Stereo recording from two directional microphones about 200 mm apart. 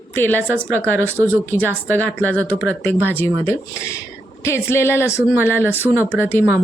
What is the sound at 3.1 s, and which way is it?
A woman's voice, 10° left (ahead or behind).